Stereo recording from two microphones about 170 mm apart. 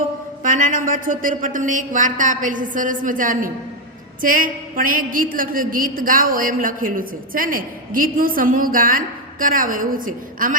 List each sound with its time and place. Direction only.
0.4 s a woman's voice: 50° right (ahead or behind)